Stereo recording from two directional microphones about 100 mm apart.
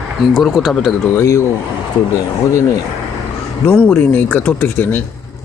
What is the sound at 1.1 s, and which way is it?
Speech, 30° left (ahead or behind).